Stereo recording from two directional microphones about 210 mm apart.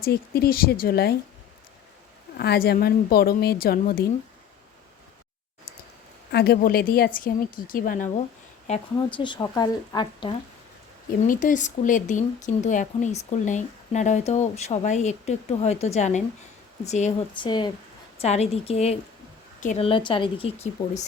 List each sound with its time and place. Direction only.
0.0 s a woman's voice: 45° left (ahead or behind)
2.4 s a woman's voice: 50° left (ahead or behind)
6.3 s a woman's voice: 50° left (ahead or behind)
8.6 s speech: 25° left (ahead or behind)
11.2 s speech: 40° left (ahead or behind)